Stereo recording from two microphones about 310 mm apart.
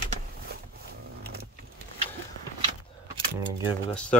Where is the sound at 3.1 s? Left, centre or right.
Centre.